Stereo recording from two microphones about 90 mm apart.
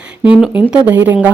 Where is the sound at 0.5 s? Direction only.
15° right (ahead or behind).